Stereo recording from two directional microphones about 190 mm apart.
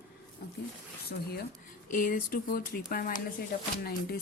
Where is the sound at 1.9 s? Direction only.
45° left (ahead or behind).